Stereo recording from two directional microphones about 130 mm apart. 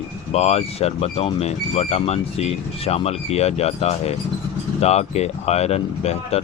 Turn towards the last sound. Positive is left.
turn(degrees=55)  # may be behind; listen again after turning